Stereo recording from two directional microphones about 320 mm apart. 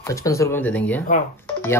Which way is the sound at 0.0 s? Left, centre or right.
Centre.